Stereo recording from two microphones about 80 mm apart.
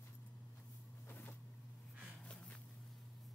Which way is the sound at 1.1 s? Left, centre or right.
Left.